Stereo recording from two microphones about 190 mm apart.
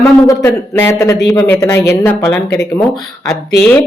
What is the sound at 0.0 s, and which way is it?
Speech, 15° left (ahead or behind).